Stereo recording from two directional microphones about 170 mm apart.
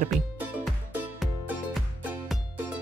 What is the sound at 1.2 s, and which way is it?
Music, centre (ahead or behind).